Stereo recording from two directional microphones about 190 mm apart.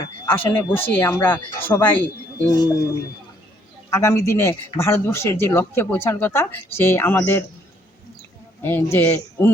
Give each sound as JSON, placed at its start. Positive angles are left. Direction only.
{"t": 0.3, "sound": "speech", "side_deg": 10}
{"t": 3.8, "sound": "speech", "side_deg": 15}
{"t": 8.6, "sound": "speech", "side_deg": 10}